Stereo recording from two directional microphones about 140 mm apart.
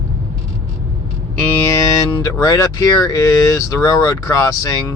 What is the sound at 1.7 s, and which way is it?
Speech, 25° left (ahead or behind).